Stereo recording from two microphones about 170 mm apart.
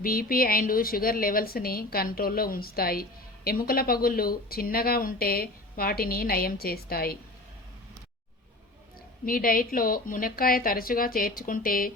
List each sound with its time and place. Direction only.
0.0 s a woman's voice: 60° left (ahead or behind)
9.2 s a woman's voice: 55° left (ahead or behind)